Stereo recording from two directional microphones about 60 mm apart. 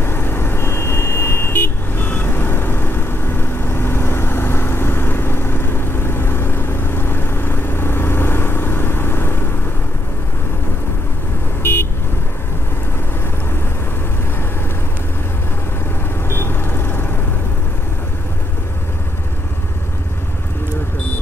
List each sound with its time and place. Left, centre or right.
0.0 s vehicle: left
11.6 s vehicle: left
16.3 s vehicle: left